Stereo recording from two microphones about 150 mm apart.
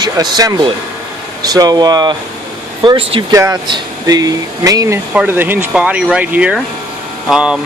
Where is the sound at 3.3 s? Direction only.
20° right (ahead or behind); by 7.6 s 5° right (ahead or behind).